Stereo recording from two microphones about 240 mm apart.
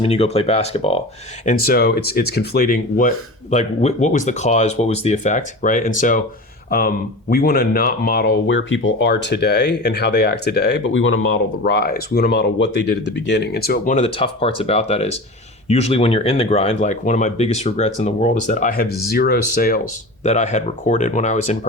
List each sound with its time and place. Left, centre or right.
0.0 s speech: left
1.5 s speech: left
20.2 s speech: left